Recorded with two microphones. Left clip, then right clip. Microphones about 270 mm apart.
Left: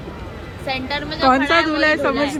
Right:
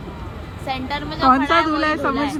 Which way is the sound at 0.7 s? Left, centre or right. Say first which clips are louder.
Left 2 dB; right.